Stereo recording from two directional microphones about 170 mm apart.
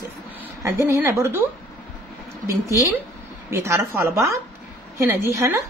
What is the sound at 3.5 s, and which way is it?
A woman's voice, 15° right (ahead or behind).